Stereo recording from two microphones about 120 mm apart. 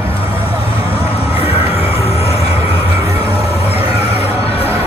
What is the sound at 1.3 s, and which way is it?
Music, 55° left (ahead or behind).